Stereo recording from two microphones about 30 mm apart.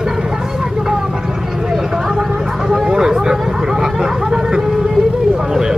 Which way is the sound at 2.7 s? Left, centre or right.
Centre.